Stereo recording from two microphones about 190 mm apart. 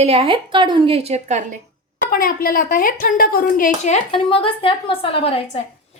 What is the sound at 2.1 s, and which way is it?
Speech, 50° left (ahead or behind).